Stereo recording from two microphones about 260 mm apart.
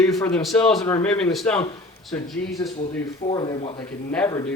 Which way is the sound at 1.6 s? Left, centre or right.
Centre.